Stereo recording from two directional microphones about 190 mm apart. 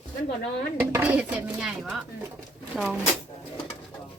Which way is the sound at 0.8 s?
10° right (ahead or behind).